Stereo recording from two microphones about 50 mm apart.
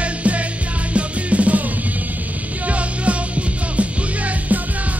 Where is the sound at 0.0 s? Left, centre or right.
Right.